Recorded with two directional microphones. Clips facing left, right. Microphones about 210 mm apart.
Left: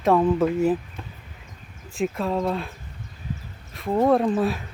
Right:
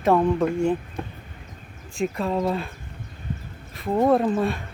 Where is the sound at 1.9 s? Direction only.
Centre (ahead or behind).